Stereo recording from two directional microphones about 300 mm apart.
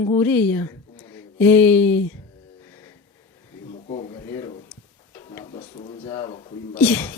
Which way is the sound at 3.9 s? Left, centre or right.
Centre.